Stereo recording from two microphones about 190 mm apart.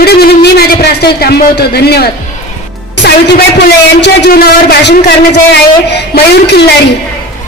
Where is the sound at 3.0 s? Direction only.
60° left (ahead or behind).